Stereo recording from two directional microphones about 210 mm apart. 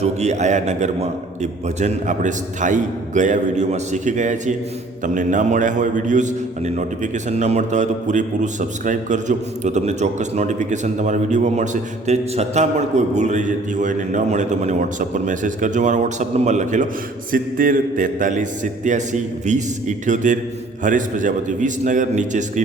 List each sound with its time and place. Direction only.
0.0 s a man's voice: 35° right (ahead or behind)